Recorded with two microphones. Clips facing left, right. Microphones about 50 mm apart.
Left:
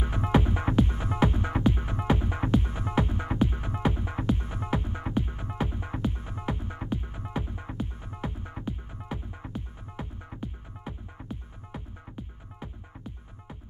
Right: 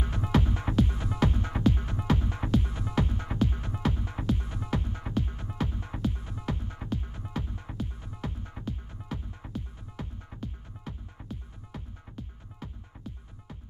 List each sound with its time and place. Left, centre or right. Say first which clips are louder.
0.2 s music: left 3 dB; centre